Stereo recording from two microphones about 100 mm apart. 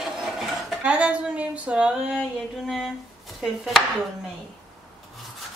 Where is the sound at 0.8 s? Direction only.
10° right (ahead or behind).